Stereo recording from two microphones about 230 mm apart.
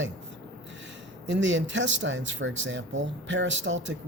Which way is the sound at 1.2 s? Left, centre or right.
Right.